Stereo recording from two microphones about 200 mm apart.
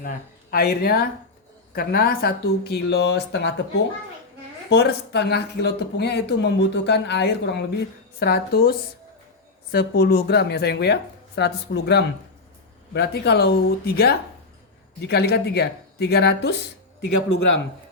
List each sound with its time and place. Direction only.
0.5 s speech: 50° left (ahead or behind)